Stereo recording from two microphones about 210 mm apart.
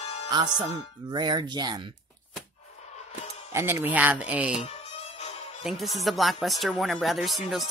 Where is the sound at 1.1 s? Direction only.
20° right (ahead or behind).